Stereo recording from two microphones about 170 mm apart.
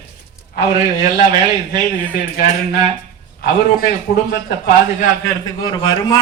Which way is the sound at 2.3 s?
65° left (ahead or behind).